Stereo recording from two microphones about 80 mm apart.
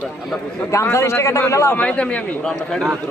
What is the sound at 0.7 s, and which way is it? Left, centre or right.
A man's voice, left.